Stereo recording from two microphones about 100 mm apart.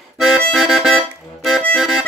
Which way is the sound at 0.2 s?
5° right (ahead or behind).